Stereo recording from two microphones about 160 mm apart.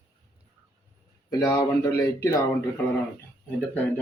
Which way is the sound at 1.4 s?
20° left (ahead or behind).